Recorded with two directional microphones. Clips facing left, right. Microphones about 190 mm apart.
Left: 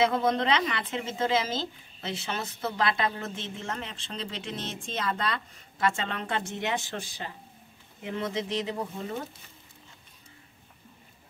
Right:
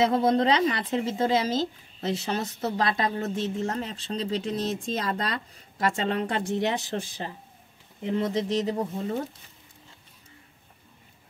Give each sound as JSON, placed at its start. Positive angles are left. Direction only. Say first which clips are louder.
{"t": 0.0, "sound": "speech", "louder": "right 3 dB", "side_deg": -35}